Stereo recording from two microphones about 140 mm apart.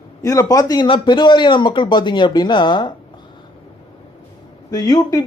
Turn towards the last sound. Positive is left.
turn(degrees=30)  # may be behind; listen again after turning